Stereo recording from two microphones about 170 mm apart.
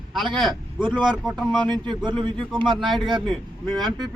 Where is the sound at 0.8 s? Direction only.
25° right (ahead or behind).